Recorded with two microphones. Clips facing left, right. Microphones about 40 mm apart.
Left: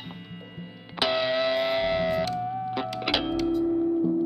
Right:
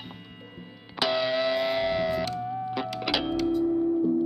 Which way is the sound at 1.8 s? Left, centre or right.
Left.